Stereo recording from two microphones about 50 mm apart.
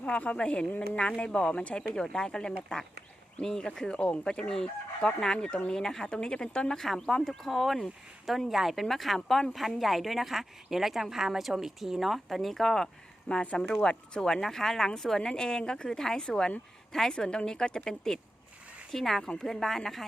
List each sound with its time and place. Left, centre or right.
0.0 s speech: left
3.4 s chicken: centre
6.7 s speech: centre
13.6 s chicken: centre
18.9 s speech: centre
19.2 s chicken: centre
19.5 s speech: centre